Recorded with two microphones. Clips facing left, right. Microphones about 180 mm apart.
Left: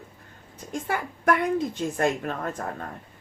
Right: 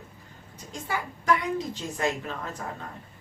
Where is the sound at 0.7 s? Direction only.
55° left (ahead or behind).